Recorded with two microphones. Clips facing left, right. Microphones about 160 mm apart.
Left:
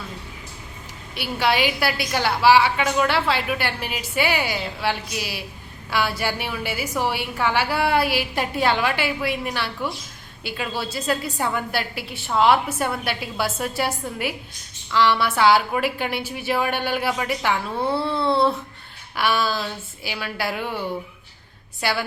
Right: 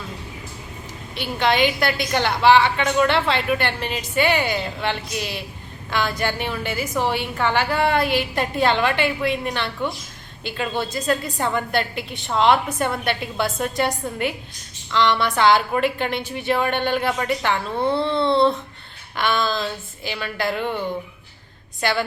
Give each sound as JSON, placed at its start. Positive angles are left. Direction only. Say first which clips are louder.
{"t": 1.1, "sound": "a woman's voice", "louder": "right 1 dB", "side_deg": 10}
{"t": 21.8, "sound": "a woman's voice", "louder": "right 3 dB", "side_deg": 10}